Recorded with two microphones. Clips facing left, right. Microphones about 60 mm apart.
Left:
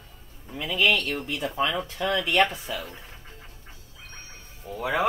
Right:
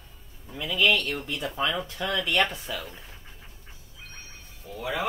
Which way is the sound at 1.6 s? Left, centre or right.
Centre.